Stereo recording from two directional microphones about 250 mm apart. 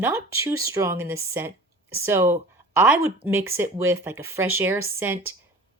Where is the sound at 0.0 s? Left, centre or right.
Centre.